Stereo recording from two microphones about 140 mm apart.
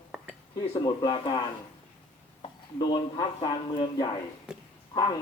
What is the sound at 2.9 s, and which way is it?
A man's voice, 30° left (ahead or behind).